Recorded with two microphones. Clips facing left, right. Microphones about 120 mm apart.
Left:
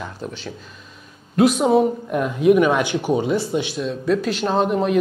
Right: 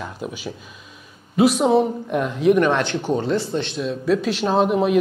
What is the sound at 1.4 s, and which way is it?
Speech, centre (ahead or behind).